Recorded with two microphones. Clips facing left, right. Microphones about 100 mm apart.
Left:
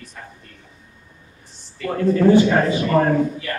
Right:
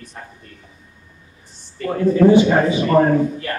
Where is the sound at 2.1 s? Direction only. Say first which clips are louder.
Right 2 dB; 15° right (ahead or behind).